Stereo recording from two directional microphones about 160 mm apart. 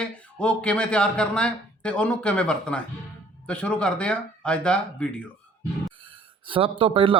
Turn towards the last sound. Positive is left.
turn(degrees=-35)  # may be behind; listen again after turning